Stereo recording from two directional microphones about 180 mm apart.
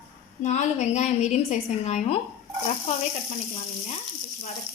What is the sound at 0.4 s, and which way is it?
A woman's voice, 40° left (ahead or behind).